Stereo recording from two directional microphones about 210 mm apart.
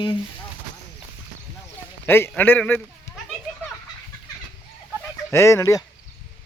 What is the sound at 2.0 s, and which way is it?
Speech, 10° left (ahead or behind).